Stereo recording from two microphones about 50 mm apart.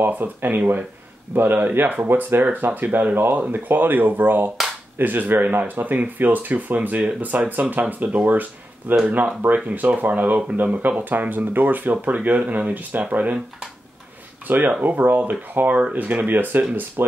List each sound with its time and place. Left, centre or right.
0.0 s speech: right
14.8 s speech: right